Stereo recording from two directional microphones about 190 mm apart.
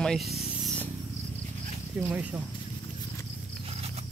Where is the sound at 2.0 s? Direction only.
10° right (ahead or behind).